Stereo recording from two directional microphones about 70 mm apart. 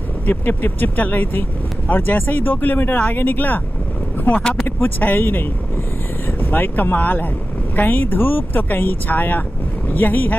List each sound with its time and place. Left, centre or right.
0.3 s speech: left
4.4 s speech: centre
4.6 s speech: left